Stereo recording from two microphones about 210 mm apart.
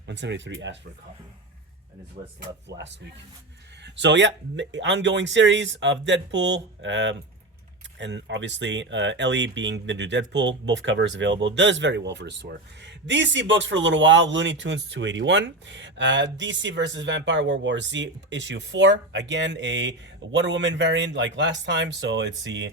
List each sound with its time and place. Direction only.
0.1 s speech: 60° right (ahead or behind)
2.6 s speech: 55° right (ahead or behind)